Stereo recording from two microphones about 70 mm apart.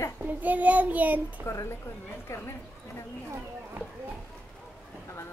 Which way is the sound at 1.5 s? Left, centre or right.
Left.